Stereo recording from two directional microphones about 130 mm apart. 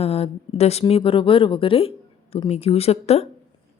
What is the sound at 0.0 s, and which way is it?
Speech, 50° left (ahead or behind).